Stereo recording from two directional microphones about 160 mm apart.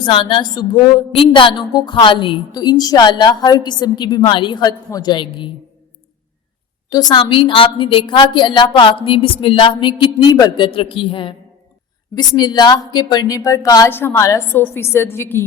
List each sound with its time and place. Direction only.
0.0 s a woman's voice: 30° left (ahead or behind)
6.9 s a woman's voice: 25° left (ahead or behind)
10.7 s a woman's voice: 35° left (ahead or behind); by 15.4 s 15° left (ahead or behind)